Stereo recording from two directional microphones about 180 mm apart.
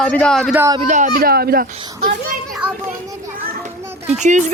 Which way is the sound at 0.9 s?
45° right (ahead or behind).